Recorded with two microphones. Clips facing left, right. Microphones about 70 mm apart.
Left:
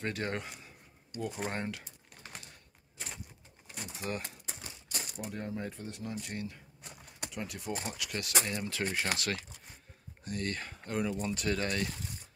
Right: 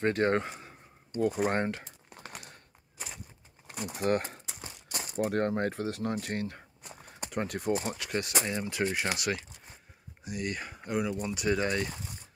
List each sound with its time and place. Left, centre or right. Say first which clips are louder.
0.0 s speech: right 9 dB; right
3.9 s speech: right 10 dB; right
4.8 s a sound: right 10 dB; right
5.3 s speech: right 9 dB; right
7.7 s speech: right 6 dB; right; by 11.9 s centre